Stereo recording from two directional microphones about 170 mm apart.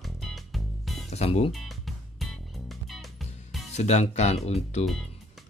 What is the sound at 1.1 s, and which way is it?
Speech, 40° left (ahead or behind).